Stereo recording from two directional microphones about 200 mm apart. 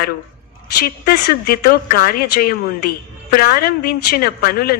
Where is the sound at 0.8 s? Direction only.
50° left (ahead or behind).